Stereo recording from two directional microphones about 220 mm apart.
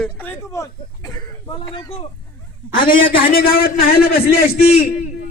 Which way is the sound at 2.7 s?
40° left (ahead or behind).